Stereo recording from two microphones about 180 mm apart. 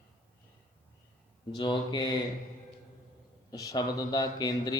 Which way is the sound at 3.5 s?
20° left (ahead or behind).